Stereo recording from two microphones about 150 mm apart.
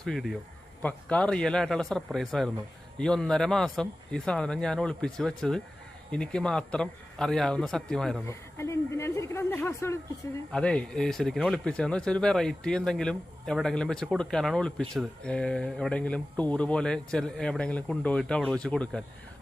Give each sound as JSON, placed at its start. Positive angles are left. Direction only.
{"t": 0.0, "sound": "speech", "side_deg": 0}
{"t": 8.3, "sound": "a sound", "side_deg": 20}
{"t": 10.5, "sound": "speech", "side_deg": 5}